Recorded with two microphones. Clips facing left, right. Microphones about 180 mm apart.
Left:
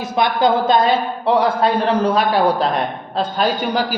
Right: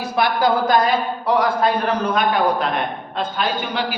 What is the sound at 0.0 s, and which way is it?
A man's voice, 20° left (ahead or behind).